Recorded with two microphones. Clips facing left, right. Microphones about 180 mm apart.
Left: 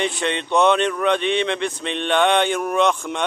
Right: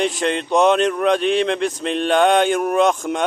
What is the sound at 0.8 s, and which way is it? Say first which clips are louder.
Mantra: right 3 dB; 40° right (ahead or behind).